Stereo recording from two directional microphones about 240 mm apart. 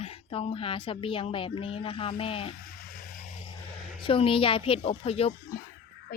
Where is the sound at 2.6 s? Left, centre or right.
Left.